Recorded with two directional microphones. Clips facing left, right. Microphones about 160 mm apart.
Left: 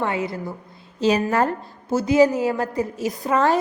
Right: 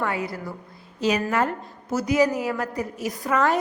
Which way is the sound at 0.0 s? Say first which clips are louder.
Left 3 dB; 25° left (ahead or behind).